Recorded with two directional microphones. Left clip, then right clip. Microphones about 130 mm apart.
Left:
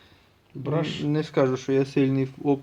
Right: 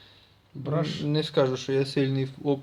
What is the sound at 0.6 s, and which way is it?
Speech, 35° left (ahead or behind).